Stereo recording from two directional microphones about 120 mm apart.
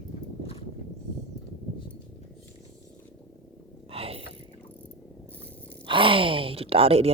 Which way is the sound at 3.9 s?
55° right (ahead or behind).